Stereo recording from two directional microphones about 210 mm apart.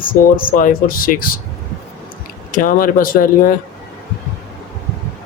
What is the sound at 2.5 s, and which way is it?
Speech, 40° left (ahead or behind).